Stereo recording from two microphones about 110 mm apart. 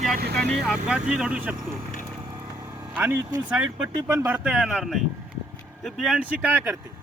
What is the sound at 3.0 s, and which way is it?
Speech, 15° right (ahead or behind).